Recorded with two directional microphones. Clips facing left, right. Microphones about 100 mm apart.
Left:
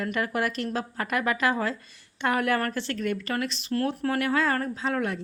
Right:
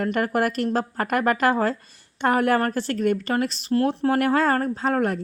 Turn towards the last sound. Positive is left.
turn(degrees=-45)  # may be behind; listen again after turning